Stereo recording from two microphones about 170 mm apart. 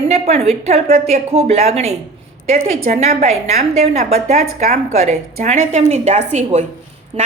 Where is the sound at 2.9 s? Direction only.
50° right (ahead or behind).